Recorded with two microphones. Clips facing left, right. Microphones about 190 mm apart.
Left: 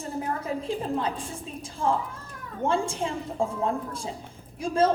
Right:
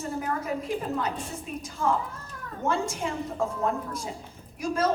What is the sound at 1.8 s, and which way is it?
A woman's voice, 30° left (ahead or behind).